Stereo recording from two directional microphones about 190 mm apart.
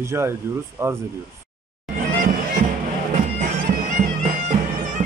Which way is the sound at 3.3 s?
45° right (ahead or behind).